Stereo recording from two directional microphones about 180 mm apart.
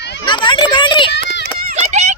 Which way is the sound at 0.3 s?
25° left (ahead or behind).